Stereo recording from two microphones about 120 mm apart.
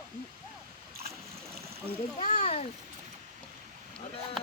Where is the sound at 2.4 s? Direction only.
65° left (ahead or behind).